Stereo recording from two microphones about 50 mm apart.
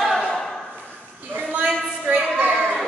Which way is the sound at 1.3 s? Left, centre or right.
Right.